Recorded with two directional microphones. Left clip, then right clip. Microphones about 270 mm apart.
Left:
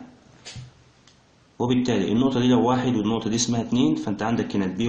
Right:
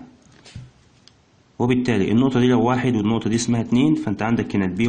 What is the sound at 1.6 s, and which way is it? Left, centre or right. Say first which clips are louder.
A man's voice: right 3 dB; right.